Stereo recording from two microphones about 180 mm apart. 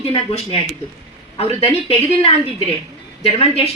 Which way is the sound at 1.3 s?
35° left (ahead or behind).